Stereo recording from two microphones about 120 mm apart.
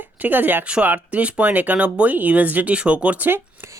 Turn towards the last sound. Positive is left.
turn(degrees=-15)  # may be behind; listen again after turning